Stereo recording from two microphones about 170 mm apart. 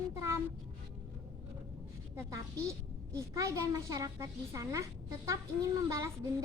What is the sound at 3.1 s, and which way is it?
A woman's voice, 20° right (ahead or behind).